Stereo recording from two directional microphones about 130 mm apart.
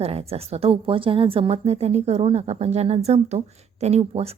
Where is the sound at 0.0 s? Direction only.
50° right (ahead or behind).